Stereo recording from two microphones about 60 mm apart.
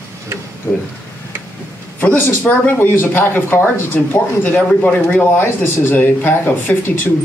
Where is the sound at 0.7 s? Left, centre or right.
Left.